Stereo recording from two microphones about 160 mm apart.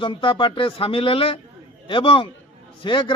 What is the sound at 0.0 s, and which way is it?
Speech, 30° left (ahead or behind).